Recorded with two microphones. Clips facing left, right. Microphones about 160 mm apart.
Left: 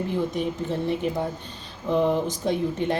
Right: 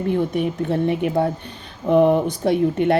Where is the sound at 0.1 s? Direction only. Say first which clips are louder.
Right 5 dB; 60° right (ahead or behind).